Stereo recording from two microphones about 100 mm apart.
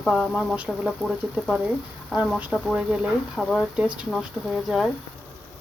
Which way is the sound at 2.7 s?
10° right (ahead or behind).